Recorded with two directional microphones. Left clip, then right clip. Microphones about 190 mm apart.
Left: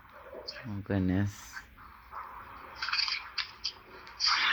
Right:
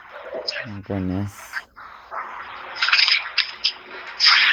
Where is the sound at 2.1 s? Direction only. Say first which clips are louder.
Right 12 dB; 40° right (ahead or behind).